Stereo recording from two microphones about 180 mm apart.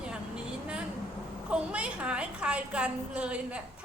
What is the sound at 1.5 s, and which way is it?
A woman's voice, 5° right (ahead or behind).